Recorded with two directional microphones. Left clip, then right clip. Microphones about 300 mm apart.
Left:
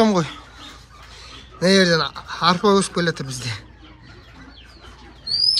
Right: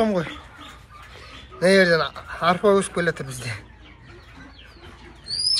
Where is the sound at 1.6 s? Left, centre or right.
Centre.